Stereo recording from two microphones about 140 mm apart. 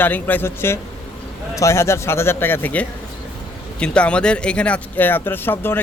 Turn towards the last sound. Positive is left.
turn(degrees=15)  # may be behind; listen again after turning